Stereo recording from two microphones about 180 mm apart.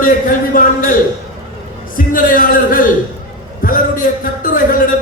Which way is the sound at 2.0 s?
50° left (ahead or behind).